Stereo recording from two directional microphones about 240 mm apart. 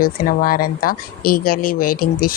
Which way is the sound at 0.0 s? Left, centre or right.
Left.